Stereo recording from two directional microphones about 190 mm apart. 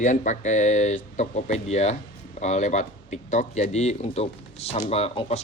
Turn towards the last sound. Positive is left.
turn(degrees=35)  # may be behind; listen again after turning